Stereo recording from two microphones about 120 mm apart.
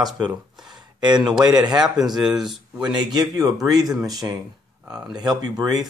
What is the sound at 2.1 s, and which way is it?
Speech, 5° right (ahead or behind).